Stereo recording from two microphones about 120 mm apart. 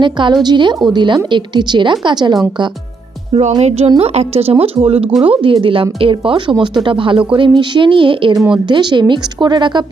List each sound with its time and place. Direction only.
0.0 s a woman's voice: 40° right (ahead or behind)
3.6 s a woman's voice: 60° right (ahead or behind); by 8.4 s 45° right (ahead or behind)
8.4 s a woman's voice: 5° right (ahead or behind)
8.6 s a woman's voice: 40° right (ahead or behind)